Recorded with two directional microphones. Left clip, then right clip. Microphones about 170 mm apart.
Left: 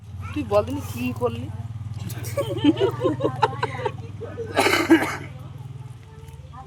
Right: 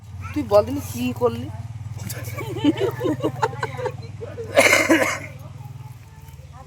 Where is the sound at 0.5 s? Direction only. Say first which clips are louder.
Right 4 dB; 35° right (ahead or behind).